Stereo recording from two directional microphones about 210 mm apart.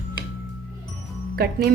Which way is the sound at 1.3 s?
45° right (ahead or behind).